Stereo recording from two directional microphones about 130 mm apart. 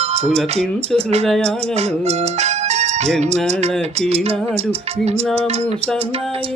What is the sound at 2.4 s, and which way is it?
Music, 60° right (ahead or behind).